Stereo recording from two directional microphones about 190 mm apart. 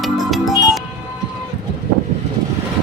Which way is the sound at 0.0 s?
Centre (ahead or behind).